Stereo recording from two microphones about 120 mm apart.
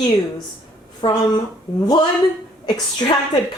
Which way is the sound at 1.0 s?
40° left (ahead or behind).